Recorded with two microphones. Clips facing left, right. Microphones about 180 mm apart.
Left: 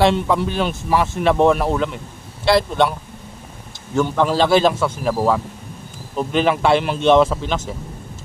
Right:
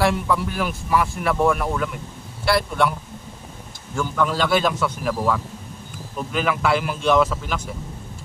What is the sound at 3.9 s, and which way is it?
A man's voice, 30° left (ahead or behind).